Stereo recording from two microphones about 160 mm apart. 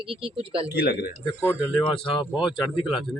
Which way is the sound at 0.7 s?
80° left.